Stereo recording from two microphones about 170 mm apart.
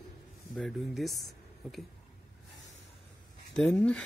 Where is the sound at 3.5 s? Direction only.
5° left (ahead or behind).